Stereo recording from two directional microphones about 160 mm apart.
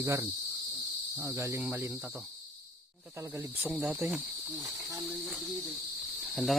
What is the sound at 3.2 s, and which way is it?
Cricket, 15° right (ahead or behind).